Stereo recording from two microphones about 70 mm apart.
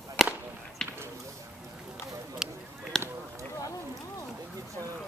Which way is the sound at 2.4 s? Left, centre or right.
Centre.